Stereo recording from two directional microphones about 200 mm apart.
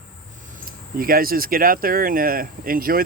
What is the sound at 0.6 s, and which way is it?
Speech, 45° right (ahead or behind).